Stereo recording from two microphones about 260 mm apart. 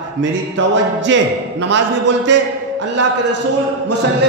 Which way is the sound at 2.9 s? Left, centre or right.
Right.